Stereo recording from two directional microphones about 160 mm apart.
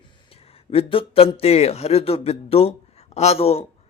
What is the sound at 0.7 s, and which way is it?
A man's voice, 35° left (ahead or behind).